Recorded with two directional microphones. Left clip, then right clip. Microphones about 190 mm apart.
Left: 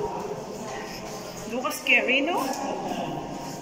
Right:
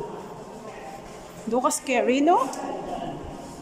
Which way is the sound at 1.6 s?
25° right (ahead or behind).